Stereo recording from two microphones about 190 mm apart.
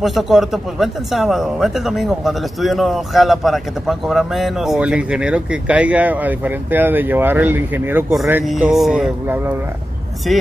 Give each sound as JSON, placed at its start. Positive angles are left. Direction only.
{"t": 0.0, "sound": "speech", "side_deg": 0}